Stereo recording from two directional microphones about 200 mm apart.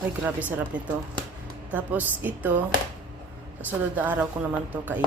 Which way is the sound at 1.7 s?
10° right (ahead or behind).